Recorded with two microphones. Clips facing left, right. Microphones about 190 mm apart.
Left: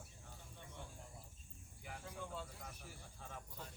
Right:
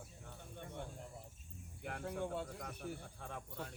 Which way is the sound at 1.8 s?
65° right (ahead or behind).